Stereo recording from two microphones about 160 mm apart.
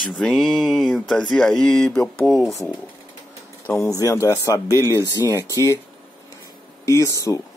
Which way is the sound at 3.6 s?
15° left (ahead or behind).